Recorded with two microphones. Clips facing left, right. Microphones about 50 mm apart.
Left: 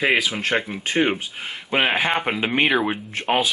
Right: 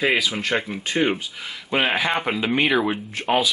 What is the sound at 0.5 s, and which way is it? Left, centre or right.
Speech, centre.